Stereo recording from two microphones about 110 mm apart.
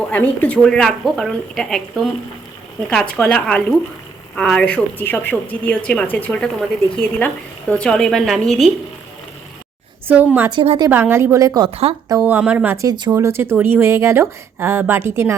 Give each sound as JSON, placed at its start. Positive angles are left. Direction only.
{"t": 0.1, "sound": "a woman's voice", "side_deg": 15}
{"t": 10.1, "sound": "speech", "side_deg": -15}
{"t": 10.5, "sound": "a woman's voice", "side_deg": -55}
{"t": 10.8, "sound": "speech", "side_deg": -20}
{"t": 11.7, "sound": "speech", "side_deg": -70}
{"t": 12.2, "sound": "speech", "side_deg": -15}
{"t": 12.7, "sound": "speech", "side_deg": -30}